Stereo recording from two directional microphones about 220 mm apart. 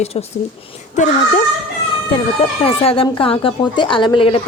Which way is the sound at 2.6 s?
25° left (ahead or behind).